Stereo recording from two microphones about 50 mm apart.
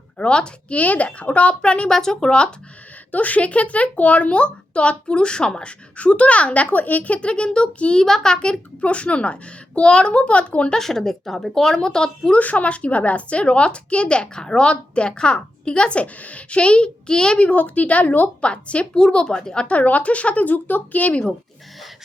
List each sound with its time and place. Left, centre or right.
0.2 s speech: centre
1.9 s a woman's voice: centre
3.1 s speech: left
8.0 s a woman's voice: centre; by 10.8 s left
10.8 s a woman's voice: centre
12.4 s speech: left
17.5 s a woman's voice: left
18.4 s a woman's voice: left
19.6 s a woman's voice: left
21.1 s speech: left